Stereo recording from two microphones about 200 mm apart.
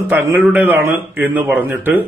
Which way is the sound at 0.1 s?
10° right (ahead or behind).